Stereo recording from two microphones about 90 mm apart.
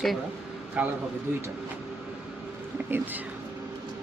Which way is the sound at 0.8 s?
15° right (ahead or behind).